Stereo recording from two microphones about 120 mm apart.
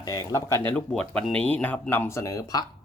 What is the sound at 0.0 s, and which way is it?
Speech, 30° left (ahead or behind).